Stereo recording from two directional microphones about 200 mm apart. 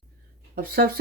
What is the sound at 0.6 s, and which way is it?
Speech, 45° right (ahead or behind).